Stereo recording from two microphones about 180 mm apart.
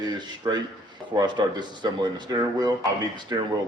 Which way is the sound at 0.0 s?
25° right (ahead or behind).